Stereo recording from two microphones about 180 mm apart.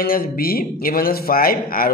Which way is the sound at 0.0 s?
55° left (ahead or behind).